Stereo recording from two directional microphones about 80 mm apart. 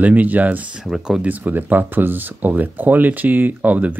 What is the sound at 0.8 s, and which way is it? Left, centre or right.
Speech, centre.